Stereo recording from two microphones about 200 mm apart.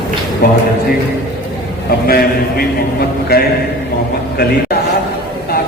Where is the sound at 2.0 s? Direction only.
50° left (ahead or behind).